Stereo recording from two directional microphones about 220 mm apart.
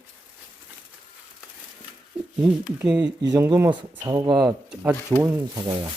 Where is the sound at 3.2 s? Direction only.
15° right (ahead or behind).